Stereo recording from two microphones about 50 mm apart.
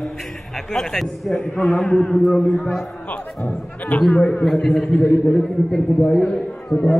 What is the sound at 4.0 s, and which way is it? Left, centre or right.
A man's voice, centre.